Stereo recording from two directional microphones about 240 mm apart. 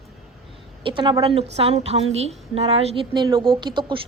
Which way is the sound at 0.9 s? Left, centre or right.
Centre.